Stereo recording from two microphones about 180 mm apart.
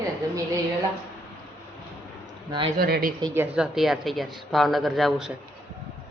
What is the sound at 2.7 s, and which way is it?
Speech, 55° right (ahead or behind).